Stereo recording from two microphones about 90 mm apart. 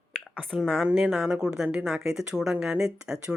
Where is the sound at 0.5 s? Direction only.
Centre (ahead or behind).